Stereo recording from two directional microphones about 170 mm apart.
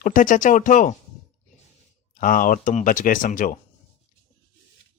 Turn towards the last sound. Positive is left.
turn(degrees=50)  # may be behind; listen again after turning